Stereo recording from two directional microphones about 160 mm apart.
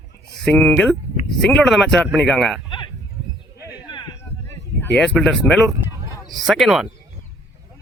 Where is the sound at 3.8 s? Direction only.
30° left (ahead or behind).